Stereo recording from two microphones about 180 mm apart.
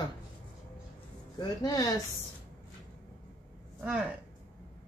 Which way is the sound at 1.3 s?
20° left (ahead or behind).